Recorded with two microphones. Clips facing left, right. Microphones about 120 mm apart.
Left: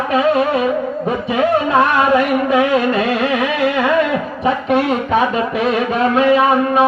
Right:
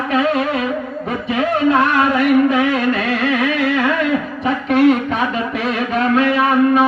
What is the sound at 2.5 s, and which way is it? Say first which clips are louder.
Speech: left 2 dB; 25° left (ahead or behind).